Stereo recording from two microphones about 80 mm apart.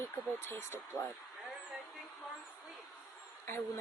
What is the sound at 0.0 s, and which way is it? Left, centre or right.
Speech, left.